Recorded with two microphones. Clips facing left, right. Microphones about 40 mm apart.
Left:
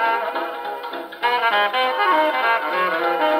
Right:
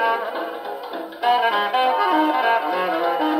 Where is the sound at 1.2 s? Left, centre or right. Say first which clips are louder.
Even; left.